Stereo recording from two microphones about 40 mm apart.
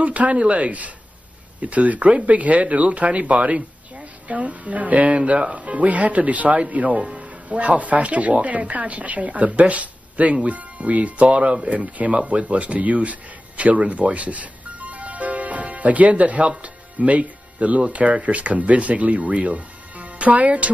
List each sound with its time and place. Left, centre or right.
0.0 s speech: right